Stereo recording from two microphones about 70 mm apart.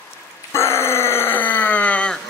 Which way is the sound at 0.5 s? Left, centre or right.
Left.